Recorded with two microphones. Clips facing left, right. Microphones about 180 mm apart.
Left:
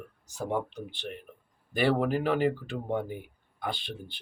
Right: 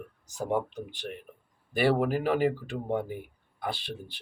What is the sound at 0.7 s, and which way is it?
Speech, 45° right (ahead or behind).